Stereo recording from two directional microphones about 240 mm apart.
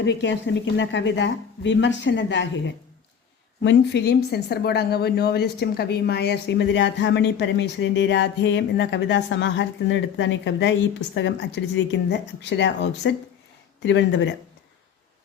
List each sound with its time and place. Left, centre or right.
0.0 s a woman's voice: left